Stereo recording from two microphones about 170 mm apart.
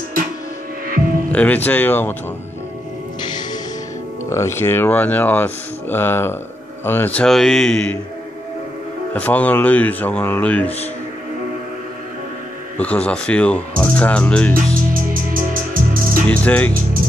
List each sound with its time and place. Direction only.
1.3 s speech: 10° left (ahead or behind)
4.3 s a man's voice: 15° left (ahead or behind)
9.1 s speech: 10° left (ahead or behind)
12.7 s speech: 10° left (ahead or behind)
15.3 s music: 55° right (ahead or behind)
16.3 s speech: 10° left (ahead or behind)